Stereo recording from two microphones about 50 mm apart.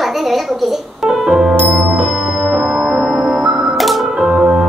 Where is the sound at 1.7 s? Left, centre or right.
Right.